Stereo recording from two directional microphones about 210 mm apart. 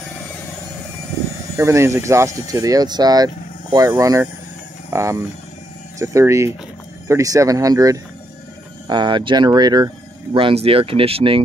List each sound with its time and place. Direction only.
1.6 s speech: 15° right (ahead or behind)